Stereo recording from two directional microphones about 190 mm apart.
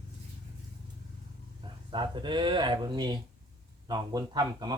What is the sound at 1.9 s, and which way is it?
A woman's voice, 25° right (ahead or behind).